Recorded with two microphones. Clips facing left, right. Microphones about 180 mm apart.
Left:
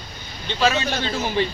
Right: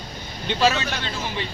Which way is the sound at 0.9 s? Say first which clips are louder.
Left 6 dB; 35° left (ahead or behind).